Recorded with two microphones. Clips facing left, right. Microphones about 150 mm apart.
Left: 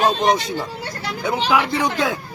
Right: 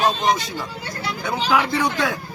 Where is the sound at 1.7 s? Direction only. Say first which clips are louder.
Left 1 dB; 20° left (ahead or behind).